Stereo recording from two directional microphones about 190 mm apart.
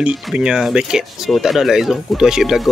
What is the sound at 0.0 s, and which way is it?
Speech, 5° right (ahead or behind).